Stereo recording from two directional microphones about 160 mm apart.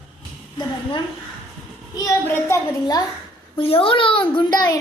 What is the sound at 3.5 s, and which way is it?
A child's voice, 35° left (ahead or behind).